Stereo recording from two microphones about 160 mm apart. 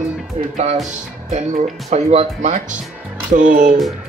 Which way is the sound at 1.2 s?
45° right (ahead or behind).